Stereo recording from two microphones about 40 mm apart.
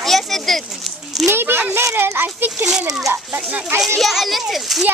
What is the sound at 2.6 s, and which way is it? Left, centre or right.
Speech, centre.